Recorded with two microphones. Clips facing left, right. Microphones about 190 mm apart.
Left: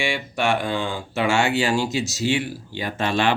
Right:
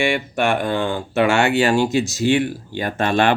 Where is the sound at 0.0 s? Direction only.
55° right (ahead or behind).